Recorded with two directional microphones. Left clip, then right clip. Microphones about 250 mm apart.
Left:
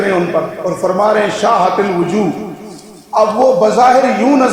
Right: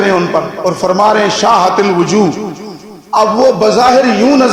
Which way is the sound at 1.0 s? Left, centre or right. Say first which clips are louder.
Right 3 dB; right.